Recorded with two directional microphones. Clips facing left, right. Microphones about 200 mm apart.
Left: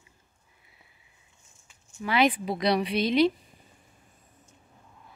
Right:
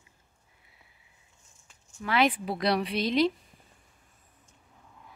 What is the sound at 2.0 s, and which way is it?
Speech, centre (ahead or behind).